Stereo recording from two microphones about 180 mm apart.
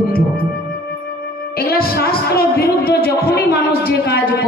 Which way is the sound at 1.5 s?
55° left (ahead or behind).